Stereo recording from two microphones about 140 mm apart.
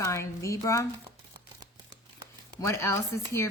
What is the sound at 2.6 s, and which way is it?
Speech, 20° left (ahead or behind).